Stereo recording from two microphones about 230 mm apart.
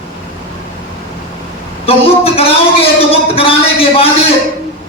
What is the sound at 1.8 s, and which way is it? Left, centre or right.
A man's voice, left.